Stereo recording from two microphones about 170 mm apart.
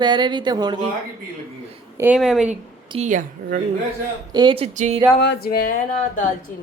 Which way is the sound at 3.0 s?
50° right (ahead or behind).